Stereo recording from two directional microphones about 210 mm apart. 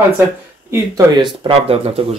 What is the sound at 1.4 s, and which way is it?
Speech, 25° right (ahead or behind).